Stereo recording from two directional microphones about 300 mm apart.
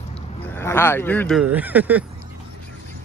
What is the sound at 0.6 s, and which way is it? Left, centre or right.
Speech, centre.